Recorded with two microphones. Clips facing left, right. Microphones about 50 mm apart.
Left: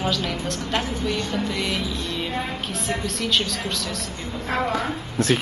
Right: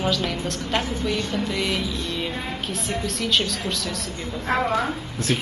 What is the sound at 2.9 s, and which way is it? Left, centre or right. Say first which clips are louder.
Speech: even; centre.